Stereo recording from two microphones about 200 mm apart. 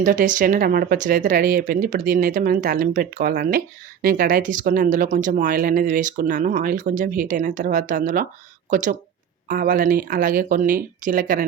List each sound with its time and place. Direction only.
0.0 s speech: 40° right (ahead or behind)